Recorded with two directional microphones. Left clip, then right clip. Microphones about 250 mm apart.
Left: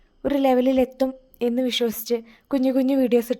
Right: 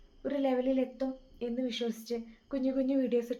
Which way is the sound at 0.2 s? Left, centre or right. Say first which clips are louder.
Left 11 dB; left.